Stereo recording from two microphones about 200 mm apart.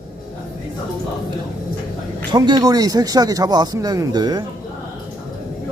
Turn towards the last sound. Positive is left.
turn(degrees=-20)  # may be behind; listen again after turning